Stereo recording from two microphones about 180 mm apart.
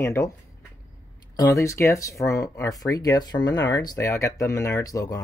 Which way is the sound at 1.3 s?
20° left (ahead or behind).